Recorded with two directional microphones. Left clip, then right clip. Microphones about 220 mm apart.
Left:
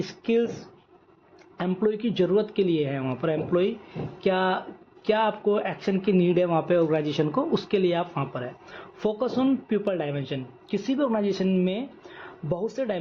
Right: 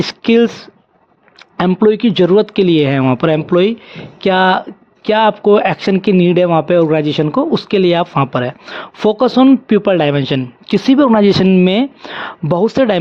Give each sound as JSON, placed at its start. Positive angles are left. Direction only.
{"t": 0.0, "sound": "speech", "side_deg": -55}
{"t": 1.5, "sound": "speech", "side_deg": -50}